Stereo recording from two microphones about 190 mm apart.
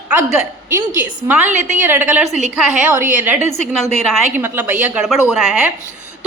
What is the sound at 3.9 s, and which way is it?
Speech, centre (ahead or behind).